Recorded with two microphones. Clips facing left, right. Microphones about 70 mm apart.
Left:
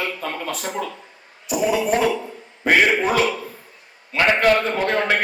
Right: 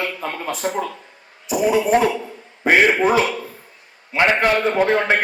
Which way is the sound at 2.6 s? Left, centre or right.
Centre.